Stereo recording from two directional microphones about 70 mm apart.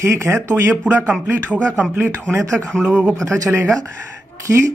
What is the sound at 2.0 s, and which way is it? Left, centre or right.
Speech, right.